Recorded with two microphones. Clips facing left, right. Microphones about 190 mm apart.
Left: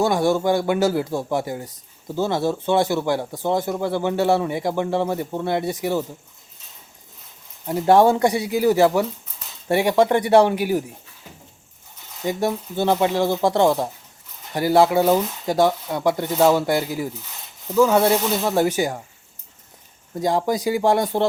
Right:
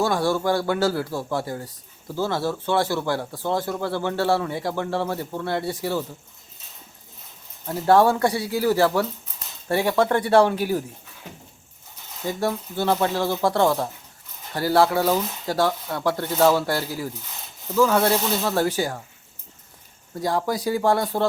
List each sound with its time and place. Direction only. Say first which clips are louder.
0.0 s speech: left 3 dB; 20° left (ahead or behind)
7.7 s speech: left 2 dB; 20° left (ahead or behind)
12.2 s speech: left 3 dB; 15° left (ahead or behind)
20.1 s speech: left 3 dB; 20° left (ahead or behind)